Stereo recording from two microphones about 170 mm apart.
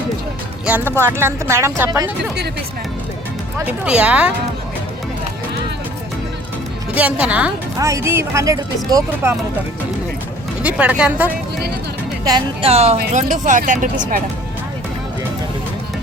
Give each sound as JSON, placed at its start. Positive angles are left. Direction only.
{"t": 0.6, "sound": "speech", "side_deg": -10}
{"t": 3.7, "sound": "speech", "side_deg": -5}
{"t": 6.9, "sound": "speech", "side_deg": -10}
{"t": 7.8, "sound": "speech", "side_deg": -20}
{"t": 10.6, "sound": "speech", "side_deg": -10}
{"t": 12.6, "sound": "speech", "side_deg": -35}